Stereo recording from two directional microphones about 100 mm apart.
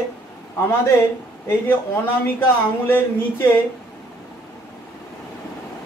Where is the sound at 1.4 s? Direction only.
20° left (ahead or behind).